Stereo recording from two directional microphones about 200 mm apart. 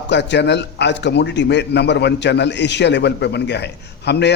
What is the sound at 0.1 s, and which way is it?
A man's voice, 60° left (ahead or behind).